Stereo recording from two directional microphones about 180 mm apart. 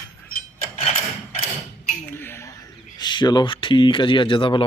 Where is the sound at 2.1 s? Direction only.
15° left (ahead or behind).